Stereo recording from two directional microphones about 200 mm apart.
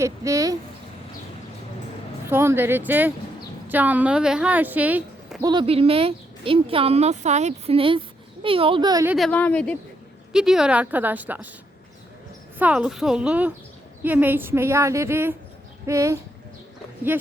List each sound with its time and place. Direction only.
0.0 s a woman's voice: 15° right (ahead or behind)
2.2 s a woman's voice: 10° right (ahead or behind)
5.5 s speech: 25° right (ahead or behind)
9.0 s a woman's voice: centre (ahead or behind)
12.5 s a woman's voice: 5° right (ahead or behind)